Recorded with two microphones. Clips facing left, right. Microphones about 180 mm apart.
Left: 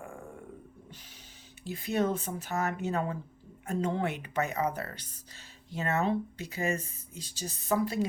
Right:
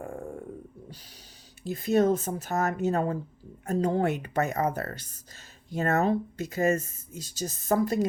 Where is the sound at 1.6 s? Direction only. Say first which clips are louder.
Right 6 dB; 40° right (ahead or behind).